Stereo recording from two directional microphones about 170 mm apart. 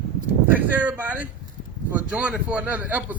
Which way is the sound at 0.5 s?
10° right (ahead or behind).